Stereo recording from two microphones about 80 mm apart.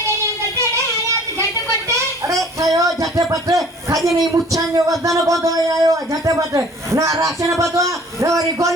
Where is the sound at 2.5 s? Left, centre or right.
Right.